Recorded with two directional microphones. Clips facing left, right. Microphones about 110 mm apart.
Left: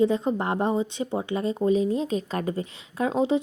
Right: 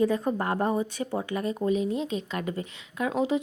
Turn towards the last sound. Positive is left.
turn(degrees=25)  # may be behind; listen again after turning